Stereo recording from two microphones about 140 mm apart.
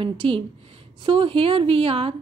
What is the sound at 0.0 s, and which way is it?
A woman's voice, 40° right (ahead or behind).